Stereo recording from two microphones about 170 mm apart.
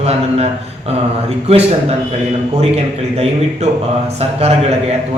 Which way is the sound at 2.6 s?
35° right (ahead or behind).